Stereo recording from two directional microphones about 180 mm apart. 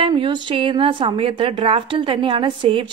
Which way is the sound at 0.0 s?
25° right (ahead or behind).